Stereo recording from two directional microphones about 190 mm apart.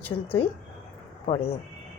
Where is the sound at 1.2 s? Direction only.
35° left (ahead or behind).